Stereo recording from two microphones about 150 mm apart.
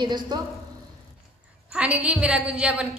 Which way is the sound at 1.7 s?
10° right (ahead or behind).